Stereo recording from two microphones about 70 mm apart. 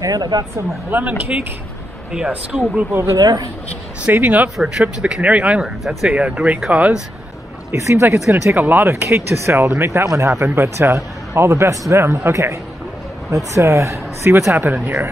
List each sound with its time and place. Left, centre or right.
0.0 s speech: right
0.8 s speech: right
2.9 s speech: right
3.2 s speech: right
4.0 s speech: right
7.7 s speech: right
8.6 s speech: right
9.0 s speech: right
10.0 s speech: right
14.5 s speech: right